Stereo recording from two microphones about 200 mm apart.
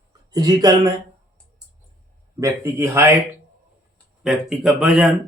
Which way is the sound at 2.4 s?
15° right (ahead or behind).